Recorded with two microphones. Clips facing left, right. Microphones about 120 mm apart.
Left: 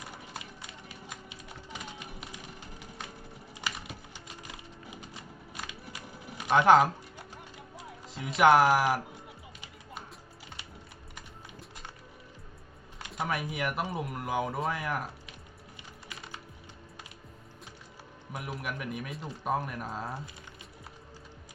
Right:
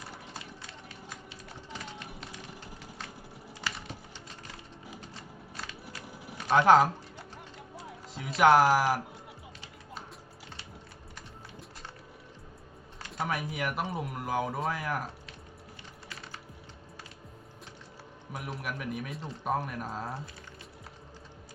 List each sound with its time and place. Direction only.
0.0 s run: 15° left (ahead or behind)
3.6 s typing: 15° left (ahead or behind)
4.4 s music: 15° left (ahead or behind)
6.1 s a sound: centre (ahead or behind)
6.3 s a sound: 15° left (ahead or behind)
6.6 s speech: centre (ahead or behind)
13.2 s speech: centre (ahead or behind)
18.3 s speech: centre (ahead or behind)